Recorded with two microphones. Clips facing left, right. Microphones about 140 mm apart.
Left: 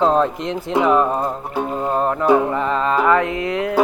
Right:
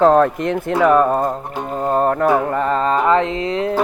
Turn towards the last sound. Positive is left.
turn(degrees=-25)  # may be behind; listen again after turning